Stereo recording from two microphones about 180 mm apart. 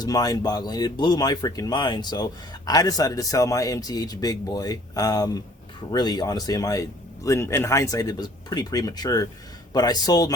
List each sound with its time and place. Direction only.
0.0 s speech: 20° left (ahead or behind)